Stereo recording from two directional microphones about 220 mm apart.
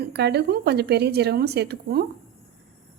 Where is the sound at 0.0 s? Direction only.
50° right (ahead or behind).